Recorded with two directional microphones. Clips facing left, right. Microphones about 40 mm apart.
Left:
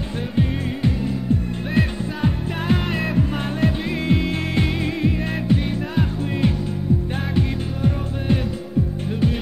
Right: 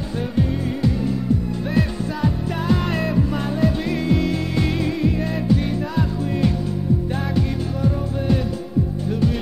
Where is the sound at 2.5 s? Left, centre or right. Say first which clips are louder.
Right 1 dB; left.